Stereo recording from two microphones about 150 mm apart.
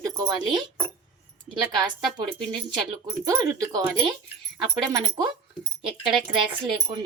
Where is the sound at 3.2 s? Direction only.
25° right (ahead or behind).